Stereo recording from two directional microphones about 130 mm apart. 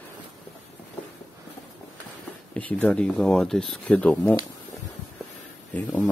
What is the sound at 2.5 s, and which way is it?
Speech, 10° left (ahead or behind).